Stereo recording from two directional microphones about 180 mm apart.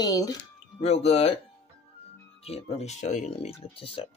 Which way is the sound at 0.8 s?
35° left (ahead or behind).